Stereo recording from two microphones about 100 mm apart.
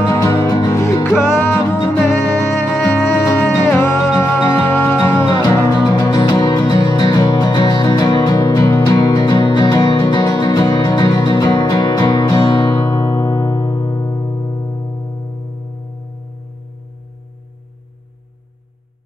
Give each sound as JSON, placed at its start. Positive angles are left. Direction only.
{"t": 0.0, "sound": "music", "side_deg": 35}